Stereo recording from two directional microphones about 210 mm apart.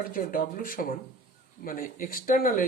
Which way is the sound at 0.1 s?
40° left (ahead or behind).